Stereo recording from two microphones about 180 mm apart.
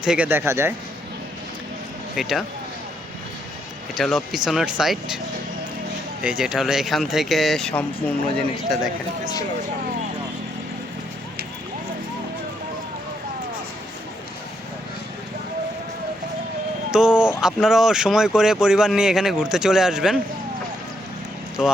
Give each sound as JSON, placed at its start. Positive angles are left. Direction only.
{"t": 0.0, "sound": "speech", "side_deg": -5}
{"t": 2.2, "sound": "speech", "side_deg": 0}
{"t": 3.9, "sound": "speech", "side_deg": 0}
{"t": 6.2, "sound": "speech", "side_deg": -5}
{"t": 16.9, "sound": "a sound", "side_deg": -5}
{"t": 17.4, "sound": "speech", "side_deg": -5}
{"t": 21.6, "sound": "speech", "side_deg": -5}